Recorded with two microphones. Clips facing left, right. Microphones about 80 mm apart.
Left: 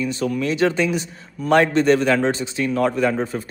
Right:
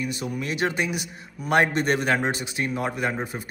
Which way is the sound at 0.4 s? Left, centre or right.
Right.